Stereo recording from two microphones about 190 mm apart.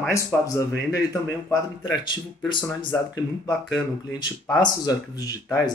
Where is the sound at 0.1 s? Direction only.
15° left (ahead or behind).